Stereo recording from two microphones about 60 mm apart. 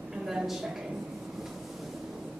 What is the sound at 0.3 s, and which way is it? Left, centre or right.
Speech, centre.